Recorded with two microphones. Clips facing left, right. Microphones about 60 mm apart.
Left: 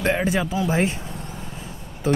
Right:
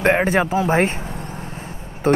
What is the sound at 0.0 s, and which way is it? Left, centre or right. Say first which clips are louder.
Speech: right 5 dB; right.